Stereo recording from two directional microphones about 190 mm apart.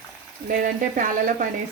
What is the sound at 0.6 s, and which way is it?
Speech, 45° right (ahead or behind).